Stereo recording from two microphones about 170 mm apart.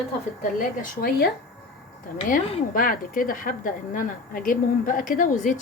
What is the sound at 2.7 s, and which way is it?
A woman's voice, 55° left (ahead or behind).